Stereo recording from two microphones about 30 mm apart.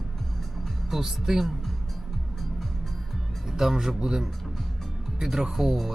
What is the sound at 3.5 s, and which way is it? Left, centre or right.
Speech, centre.